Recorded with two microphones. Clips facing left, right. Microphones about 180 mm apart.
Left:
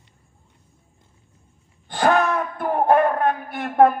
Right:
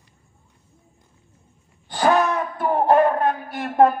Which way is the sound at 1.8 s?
55° left (ahead or behind).